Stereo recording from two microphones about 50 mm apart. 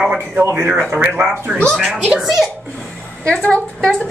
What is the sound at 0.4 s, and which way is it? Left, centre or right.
Speech, right.